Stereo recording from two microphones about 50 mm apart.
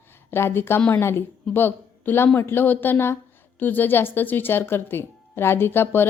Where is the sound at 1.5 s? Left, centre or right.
Left.